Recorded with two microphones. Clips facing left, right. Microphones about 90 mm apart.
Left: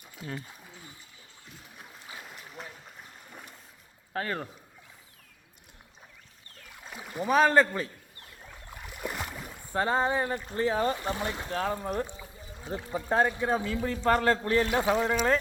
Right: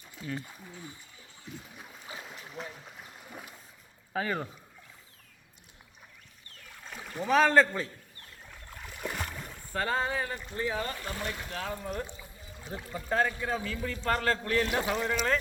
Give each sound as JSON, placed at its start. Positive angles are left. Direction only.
{"t": 0.4, "sound": "a sound", "side_deg": 5}
{"t": 1.5, "sound": "splash", "side_deg": 0}
{"t": 2.1, "sound": "boat", "side_deg": 0}
{"t": 4.1, "sound": "speech", "side_deg": 0}
{"t": 6.8, "sound": "speech", "side_deg": 5}
{"t": 8.7, "sound": "boat", "side_deg": 5}
{"t": 9.7, "sound": "speech", "side_deg": 20}
{"t": 10.3, "sound": "speech", "side_deg": 35}
{"t": 11.4, "sound": "speech", "side_deg": 40}
{"t": 12.7, "sound": "speech", "side_deg": 25}
{"t": 14.8, "sound": "speech", "side_deg": 15}